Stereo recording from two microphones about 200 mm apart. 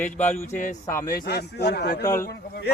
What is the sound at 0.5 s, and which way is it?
Speech, 40° left (ahead or behind).